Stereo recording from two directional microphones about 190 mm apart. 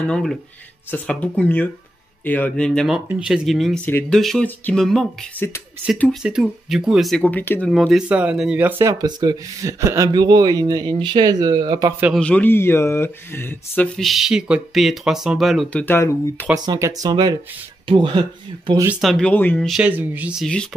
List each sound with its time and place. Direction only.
0.1 s speech: centre (ahead or behind)
7.7 s speech: 5° right (ahead or behind); by 11.9 s 20° right (ahead or behind)
12.2 s speech: 10° left (ahead or behind)
15.8 s speech: 10° left (ahead or behind)
16.5 s speech: 20° right (ahead or behind)
18.9 s speech: centre (ahead or behind)